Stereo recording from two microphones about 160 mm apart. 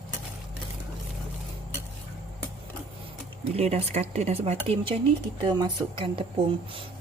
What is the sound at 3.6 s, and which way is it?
Speech, 45° right (ahead or behind).